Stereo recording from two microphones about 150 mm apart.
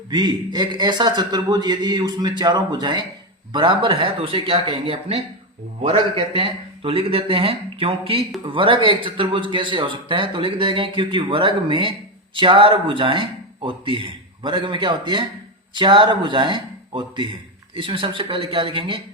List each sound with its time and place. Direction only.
0.1 s a man's voice: 30° right (ahead or behind)